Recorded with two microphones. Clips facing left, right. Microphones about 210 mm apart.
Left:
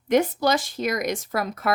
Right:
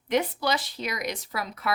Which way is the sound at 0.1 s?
45° left (ahead or behind).